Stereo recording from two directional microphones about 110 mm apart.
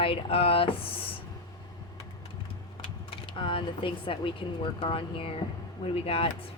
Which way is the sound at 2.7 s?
50° left (ahead or behind).